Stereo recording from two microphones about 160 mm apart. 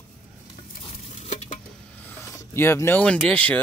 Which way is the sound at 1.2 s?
45° left (ahead or behind).